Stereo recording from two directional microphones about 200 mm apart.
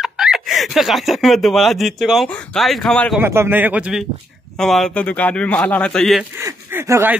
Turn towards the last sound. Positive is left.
turn(degrees=-10)  # may be behind; listen again after turning